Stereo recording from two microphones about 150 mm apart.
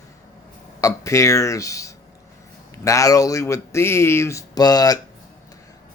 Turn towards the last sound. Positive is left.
turn(degrees=25)  # may be behind; listen again after turning